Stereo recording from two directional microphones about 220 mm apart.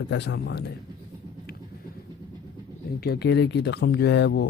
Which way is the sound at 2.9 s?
45° left (ahead or behind).